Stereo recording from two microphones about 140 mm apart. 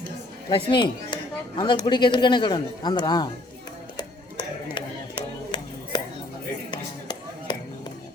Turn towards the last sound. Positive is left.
turn(degrees=30)  # may be behind; listen again after turning